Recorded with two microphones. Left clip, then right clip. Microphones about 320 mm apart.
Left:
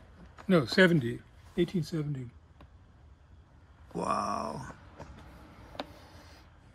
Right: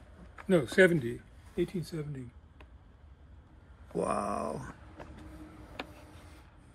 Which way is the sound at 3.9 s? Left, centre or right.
Centre.